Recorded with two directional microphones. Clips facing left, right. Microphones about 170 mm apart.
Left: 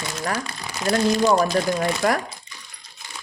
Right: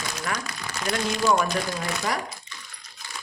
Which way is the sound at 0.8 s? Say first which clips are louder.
Left 5 dB; 40° left (ahead or behind).